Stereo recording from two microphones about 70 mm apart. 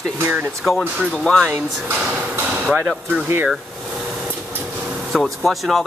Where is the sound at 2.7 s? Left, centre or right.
Centre.